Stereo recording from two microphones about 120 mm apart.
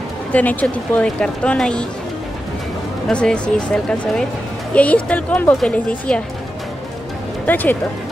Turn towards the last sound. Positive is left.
turn(degrees=15)  # may be behind; listen again after turning